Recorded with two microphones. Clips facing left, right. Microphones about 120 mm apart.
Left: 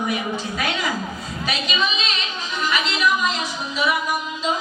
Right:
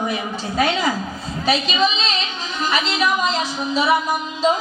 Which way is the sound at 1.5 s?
30° right (ahead or behind).